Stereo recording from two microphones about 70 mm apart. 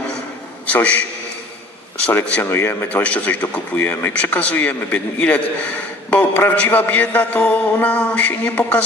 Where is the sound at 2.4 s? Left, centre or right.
Left.